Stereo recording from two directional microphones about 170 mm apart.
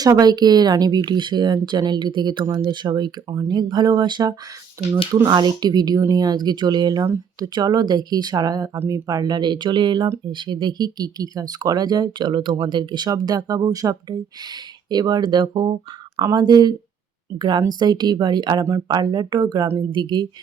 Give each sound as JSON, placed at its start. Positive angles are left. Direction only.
{"t": 0.0, "sound": "speech", "side_deg": -25}